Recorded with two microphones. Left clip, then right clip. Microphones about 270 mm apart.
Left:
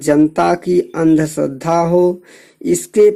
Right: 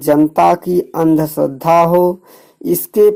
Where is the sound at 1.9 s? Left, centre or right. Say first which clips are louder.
Right 1 dB; right.